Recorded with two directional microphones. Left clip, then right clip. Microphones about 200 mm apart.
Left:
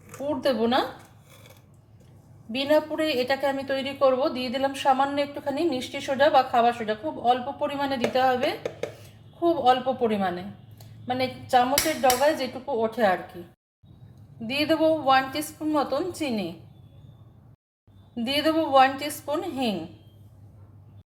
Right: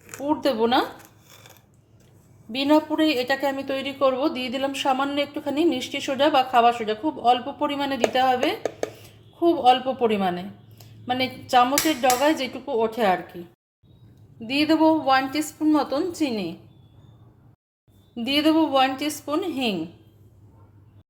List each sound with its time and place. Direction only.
0.2 s a woman's voice: 25° right (ahead or behind)
2.5 s a woman's voice: 25° right (ahead or behind)
14.3 s a woman's voice: 20° right (ahead or behind)
18.1 s a woman's voice: 20° right (ahead or behind)